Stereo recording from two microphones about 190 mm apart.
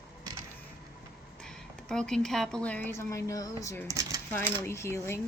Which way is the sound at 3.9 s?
15° right (ahead or behind).